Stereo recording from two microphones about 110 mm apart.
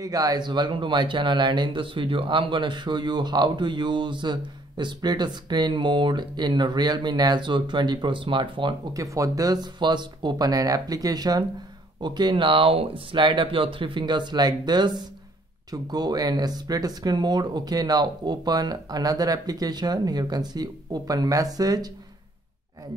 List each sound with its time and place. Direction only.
0.0 s speech: 35° right (ahead or behind)
8.9 s speech: 30° right (ahead or behind)